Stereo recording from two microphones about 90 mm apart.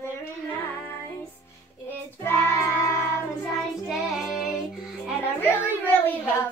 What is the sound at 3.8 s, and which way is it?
Child singing, 5° right (ahead or behind).